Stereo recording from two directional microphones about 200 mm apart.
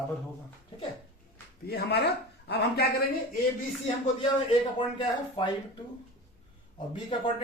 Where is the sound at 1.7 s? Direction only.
55° left (ahead or behind).